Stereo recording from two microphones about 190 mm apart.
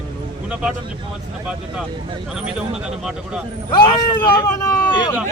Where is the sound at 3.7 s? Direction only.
20° left (ahead or behind).